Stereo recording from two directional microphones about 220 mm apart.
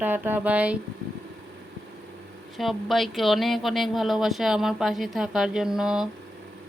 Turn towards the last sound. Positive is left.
turn(degrees=-5)  # may be behind; listen again after turning